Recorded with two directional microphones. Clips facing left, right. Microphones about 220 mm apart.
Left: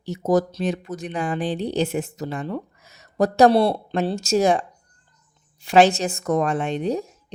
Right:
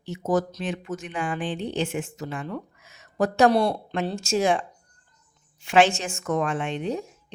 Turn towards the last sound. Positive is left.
turn(degrees=40)  # may be behind; listen again after turning